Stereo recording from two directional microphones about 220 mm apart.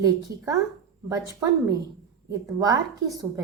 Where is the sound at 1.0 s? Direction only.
15° right (ahead or behind).